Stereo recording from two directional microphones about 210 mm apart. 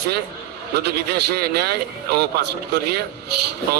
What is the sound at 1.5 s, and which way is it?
A man's voice, 50° right (ahead or behind).